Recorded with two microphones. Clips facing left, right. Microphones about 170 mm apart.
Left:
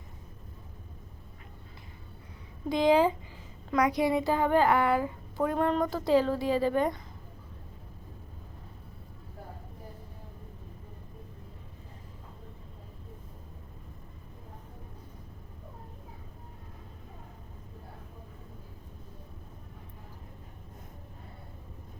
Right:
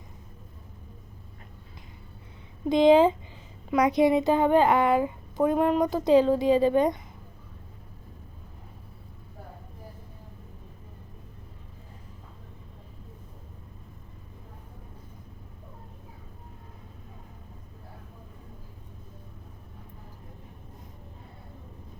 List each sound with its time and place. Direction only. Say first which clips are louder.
2.6 s a woman's voice: right 5 dB; 20° right (ahead or behind)